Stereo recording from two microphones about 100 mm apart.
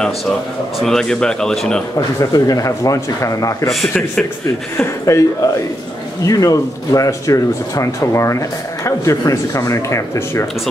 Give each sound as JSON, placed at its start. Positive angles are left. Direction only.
{"t": 0.7, "sound": "speech", "side_deg": 5}
{"t": 2.3, "sound": "speech", "side_deg": 35}
{"t": 4.7, "sound": "speech", "side_deg": 30}